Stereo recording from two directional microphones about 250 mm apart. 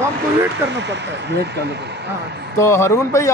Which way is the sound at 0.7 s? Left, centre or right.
Right.